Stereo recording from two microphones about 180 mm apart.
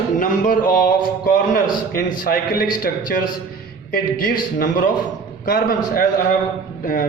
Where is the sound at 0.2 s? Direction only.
50° left (ahead or behind).